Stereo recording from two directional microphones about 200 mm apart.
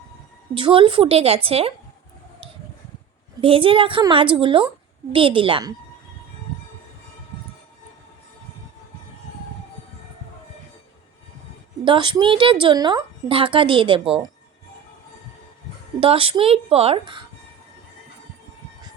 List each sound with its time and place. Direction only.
0.5 s a woman's voice: 25° right (ahead or behind)
3.4 s a woman's voice: 25° right (ahead or behind)
11.9 s a woman's voice: 25° right (ahead or behind)
16.0 s a woman's voice: 25° right (ahead or behind)